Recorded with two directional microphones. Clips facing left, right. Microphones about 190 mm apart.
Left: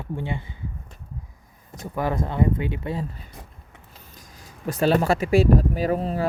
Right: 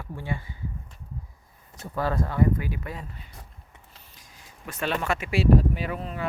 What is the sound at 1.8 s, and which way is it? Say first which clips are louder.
Speech: left 2 dB; 15° left (ahead or behind).